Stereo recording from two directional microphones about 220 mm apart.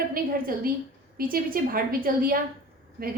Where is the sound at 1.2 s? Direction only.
40° right (ahead or behind).